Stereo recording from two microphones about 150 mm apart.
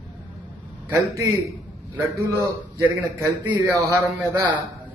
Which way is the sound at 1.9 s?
25° right (ahead or behind).